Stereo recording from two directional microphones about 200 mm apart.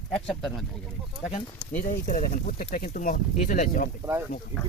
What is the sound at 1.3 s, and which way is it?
Speech, 40° left (ahead or behind).